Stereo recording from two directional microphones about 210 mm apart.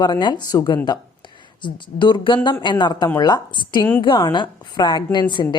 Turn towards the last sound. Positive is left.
turn(degrees=20)  # may be behind; listen again after turning